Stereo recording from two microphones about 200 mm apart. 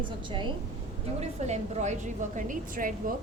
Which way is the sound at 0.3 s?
25° right (ahead or behind).